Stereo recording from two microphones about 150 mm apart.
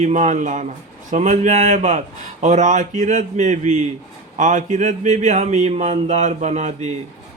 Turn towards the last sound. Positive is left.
turn(degrees=-50)  # may be behind; listen again after turning